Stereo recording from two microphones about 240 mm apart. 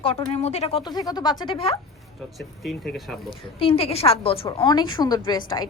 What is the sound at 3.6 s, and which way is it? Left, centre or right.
A woman's voice, left.